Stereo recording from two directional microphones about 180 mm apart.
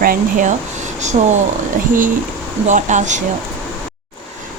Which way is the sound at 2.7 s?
40° right (ahead or behind).